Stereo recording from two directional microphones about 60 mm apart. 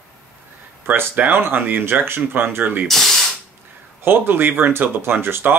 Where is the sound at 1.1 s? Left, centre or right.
Right.